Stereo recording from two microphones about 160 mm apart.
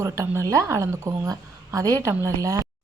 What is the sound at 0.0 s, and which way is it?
A woman's voice, 20° right (ahead or behind).